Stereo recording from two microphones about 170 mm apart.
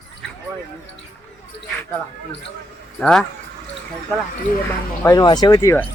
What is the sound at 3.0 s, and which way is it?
Speech, 5° left (ahead or behind).